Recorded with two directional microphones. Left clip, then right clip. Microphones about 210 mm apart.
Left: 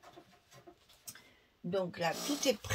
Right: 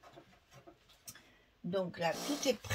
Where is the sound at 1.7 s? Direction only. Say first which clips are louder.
Left 1 dB; 40° left (ahead or behind).